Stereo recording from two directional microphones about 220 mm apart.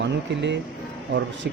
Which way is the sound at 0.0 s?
55° right (ahead or behind).